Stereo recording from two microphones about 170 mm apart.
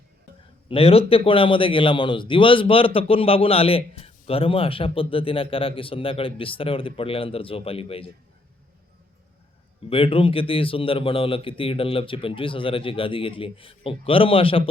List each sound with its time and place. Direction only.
0.7 s a man's voice: 35° left (ahead or behind)
9.9 s a man's voice: 35° left (ahead or behind)